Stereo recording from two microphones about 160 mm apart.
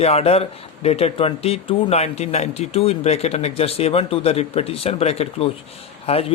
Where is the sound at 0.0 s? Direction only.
40° left (ahead or behind).